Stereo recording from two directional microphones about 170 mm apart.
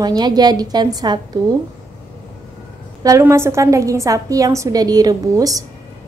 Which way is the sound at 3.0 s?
20° right (ahead or behind).